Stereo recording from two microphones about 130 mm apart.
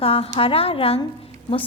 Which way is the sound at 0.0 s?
50° left (ahead or behind).